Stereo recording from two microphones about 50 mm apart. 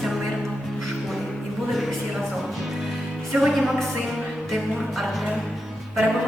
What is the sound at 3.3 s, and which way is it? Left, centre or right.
Speech, centre.